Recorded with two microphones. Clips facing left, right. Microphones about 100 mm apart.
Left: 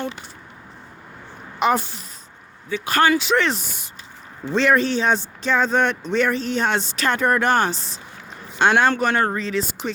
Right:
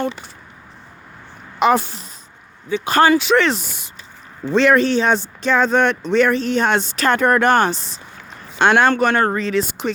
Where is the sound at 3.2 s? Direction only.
80° right.